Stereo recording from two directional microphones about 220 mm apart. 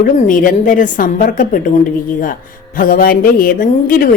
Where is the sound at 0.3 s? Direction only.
35° left (ahead or behind).